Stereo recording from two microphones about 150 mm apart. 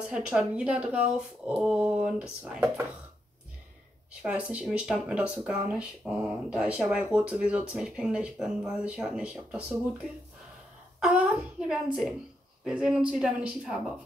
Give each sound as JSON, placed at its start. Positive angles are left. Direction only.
{"t": 0.1, "sound": "speech", "side_deg": -5}
{"t": 4.2, "sound": "speech", "side_deg": -10}
{"t": 11.0, "sound": "speech", "side_deg": -5}